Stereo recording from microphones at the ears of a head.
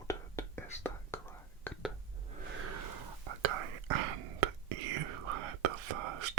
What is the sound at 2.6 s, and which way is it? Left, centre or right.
Whispering, right.